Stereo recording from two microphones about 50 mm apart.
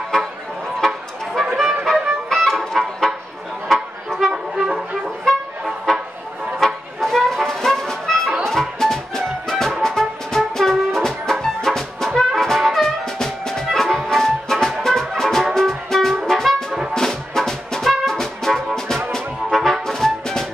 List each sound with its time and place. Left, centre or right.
0.8 s music: centre
4.2 s brass instrument: centre
6.6 s music: centre
16.9 s brass instrument: centre
19.1 s music: centre